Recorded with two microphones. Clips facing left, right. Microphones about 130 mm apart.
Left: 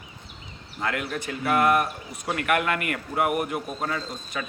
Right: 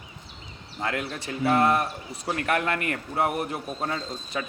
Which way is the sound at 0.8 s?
25° right (ahead or behind).